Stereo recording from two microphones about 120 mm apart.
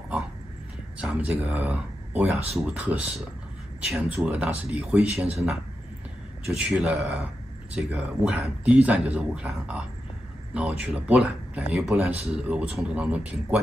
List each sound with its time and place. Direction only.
1.0 s speech: 10° right (ahead or behind)
6.4 s speech: 5° right (ahead or behind)